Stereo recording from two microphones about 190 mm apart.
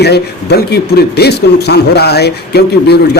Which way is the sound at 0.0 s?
60° left (ahead or behind).